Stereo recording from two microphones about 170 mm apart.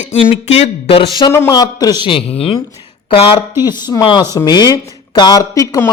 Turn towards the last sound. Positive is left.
turn(degrees=20)  # may be behind; listen again after turning